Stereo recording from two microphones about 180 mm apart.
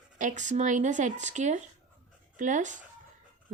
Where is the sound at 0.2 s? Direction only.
45° right (ahead or behind).